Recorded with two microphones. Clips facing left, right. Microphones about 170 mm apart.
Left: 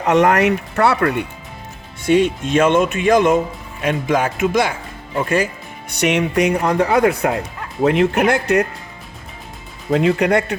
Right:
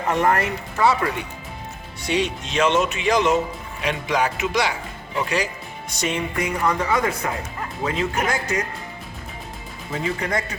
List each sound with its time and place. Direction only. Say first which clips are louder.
0.0 s speech: left 7 dB; 75° left (ahead or behind)
2.0 s speech: left 9 dB; 50° left (ahead or behind)
5.9 s speech: left 8 dB; 70° left (ahead or behind)
9.9 s speech: left 10 dB; 70° left (ahead or behind)